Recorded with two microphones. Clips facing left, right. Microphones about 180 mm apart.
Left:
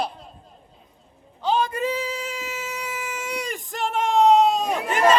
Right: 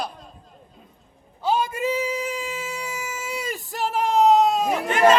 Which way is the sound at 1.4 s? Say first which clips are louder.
Even; 10° right (ahead or behind).